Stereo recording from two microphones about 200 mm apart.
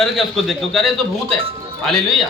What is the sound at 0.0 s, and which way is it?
A man's voice, centre (ahead or behind).